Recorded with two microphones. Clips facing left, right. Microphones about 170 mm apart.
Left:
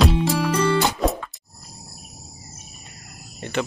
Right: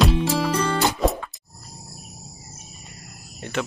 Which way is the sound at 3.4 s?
Centre (ahead or behind).